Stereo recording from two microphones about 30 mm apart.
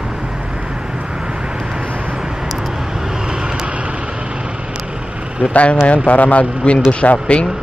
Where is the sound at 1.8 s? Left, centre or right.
Right.